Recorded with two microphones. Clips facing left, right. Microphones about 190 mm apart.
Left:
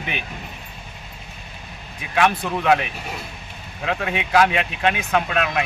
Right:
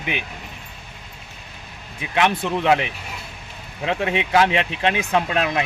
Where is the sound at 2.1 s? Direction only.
25° right (ahead or behind).